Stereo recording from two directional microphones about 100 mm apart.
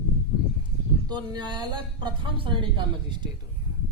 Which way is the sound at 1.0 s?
45° right (ahead or behind).